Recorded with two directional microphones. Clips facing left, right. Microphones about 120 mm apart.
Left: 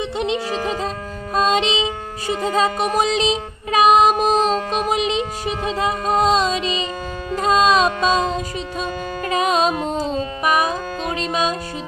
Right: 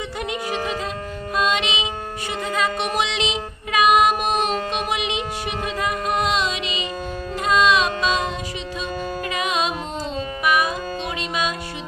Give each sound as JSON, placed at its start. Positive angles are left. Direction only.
{"t": 0.2, "sound": "music", "side_deg": 25}
{"t": 1.3, "sound": "music", "side_deg": 40}